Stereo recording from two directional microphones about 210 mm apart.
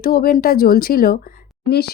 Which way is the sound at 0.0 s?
45° left (ahead or behind).